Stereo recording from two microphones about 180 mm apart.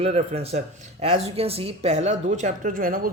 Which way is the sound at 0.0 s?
35° right (ahead or behind).